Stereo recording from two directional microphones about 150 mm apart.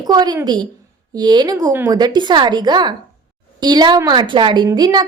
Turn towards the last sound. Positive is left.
turn(degrees=-25)  # may be behind; listen again after turning